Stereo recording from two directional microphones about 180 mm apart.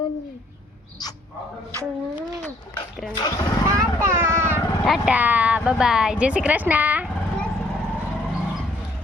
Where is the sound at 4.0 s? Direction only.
15° right (ahead or behind).